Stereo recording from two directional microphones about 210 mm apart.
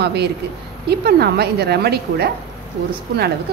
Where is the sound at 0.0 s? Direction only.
50° right (ahead or behind).